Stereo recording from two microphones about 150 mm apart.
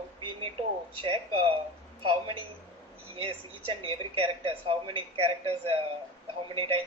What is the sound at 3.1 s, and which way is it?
Speech, 35° right (ahead or behind).